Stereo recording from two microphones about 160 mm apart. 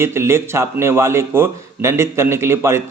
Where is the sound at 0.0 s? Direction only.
15° right (ahead or behind).